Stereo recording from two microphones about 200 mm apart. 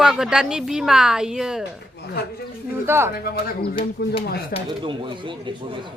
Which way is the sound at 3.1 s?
50° left (ahead or behind).